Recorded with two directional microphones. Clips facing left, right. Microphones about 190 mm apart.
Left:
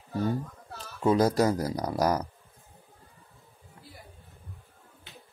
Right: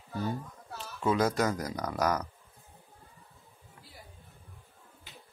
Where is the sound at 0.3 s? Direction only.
40° left (ahead or behind).